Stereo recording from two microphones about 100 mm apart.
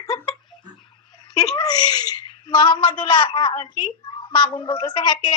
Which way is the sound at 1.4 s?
40° left (ahead or behind).